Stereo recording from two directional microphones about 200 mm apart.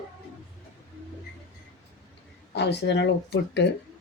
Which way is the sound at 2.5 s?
60° left (ahead or behind).